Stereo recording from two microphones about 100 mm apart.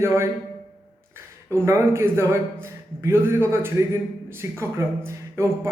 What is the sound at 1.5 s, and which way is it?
A man's voice, 30° right (ahead or behind).